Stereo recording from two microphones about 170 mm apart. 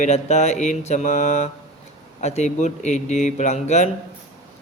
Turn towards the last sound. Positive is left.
turn(degrees=40)  # may be behind; listen again after turning